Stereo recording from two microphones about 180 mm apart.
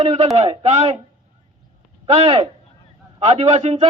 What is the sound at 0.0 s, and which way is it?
Speech, 35° right (ahead or behind).